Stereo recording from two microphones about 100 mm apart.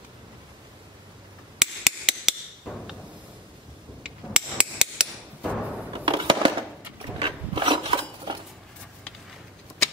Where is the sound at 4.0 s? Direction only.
10° right (ahead or behind).